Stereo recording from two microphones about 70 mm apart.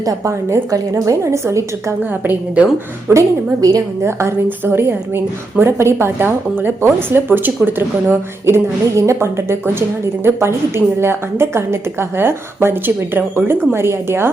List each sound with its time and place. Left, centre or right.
0.0 s a woman's voice: right
3.1 s a woman's voice: right
4.0 s a woman's voice: right
4.4 s a woman's voice: right